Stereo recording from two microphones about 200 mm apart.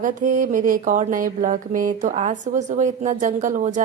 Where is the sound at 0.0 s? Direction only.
40° right (ahead or behind).